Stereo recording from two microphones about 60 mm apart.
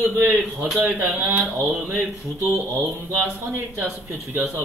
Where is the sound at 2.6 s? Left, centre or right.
Right.